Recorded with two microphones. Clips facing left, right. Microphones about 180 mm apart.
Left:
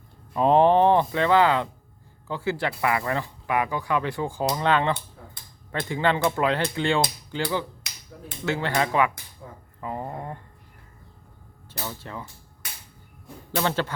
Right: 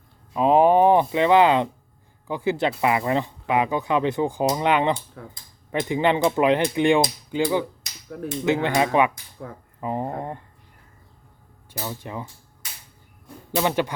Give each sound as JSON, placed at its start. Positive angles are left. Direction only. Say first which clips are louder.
{"t": 0.3, "sound": "speech", "louder": "right 1 dB", "side_deg": -5}
{"t": 5.2, "sound": "speech", "louder": "right 7 dB", "side_deg": -80}
{"t": 5.9, "sound": "speech", "louder": "right 3 dB", "side_deg": -20}
{"t": 9.4, "sound": "speech", "louder": "right 7 dB", "side_deg": -75}
{"t": 9.8, "sound": "speech", "louder": "right 5 dB", "side_deg": -20}
{"t": 11.8, "sound": "speech", "louder": "right 3 dB", "side_deg": -15}
{"t": 13.6, "sound": "speech", "louder": "right 3 dB", "side_deg": -15}